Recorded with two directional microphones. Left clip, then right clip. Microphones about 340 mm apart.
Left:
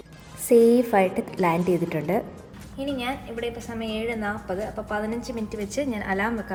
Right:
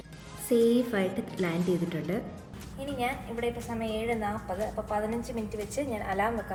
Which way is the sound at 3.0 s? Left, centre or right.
Left.